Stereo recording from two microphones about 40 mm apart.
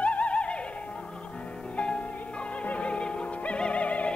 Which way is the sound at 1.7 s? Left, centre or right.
Left.